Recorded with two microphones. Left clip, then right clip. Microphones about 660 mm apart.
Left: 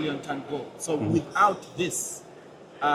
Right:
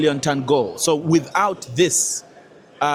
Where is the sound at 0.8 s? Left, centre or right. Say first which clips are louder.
Right 9 dB; right.